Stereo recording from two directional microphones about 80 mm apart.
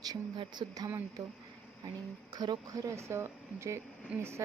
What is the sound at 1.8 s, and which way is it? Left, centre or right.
A woman's voice, right.